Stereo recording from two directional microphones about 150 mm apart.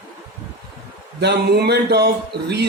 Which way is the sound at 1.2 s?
90° right.